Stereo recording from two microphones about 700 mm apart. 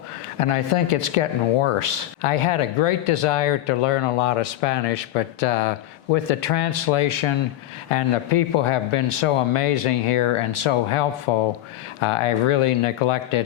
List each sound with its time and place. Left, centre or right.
0.3 s speech: left